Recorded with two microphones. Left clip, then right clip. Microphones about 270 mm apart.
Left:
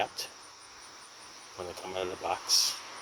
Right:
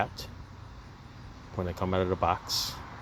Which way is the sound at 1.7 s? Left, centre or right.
Centre.